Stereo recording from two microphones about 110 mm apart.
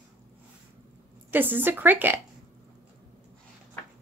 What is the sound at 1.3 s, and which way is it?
Speech, 15° right (ahead or behind).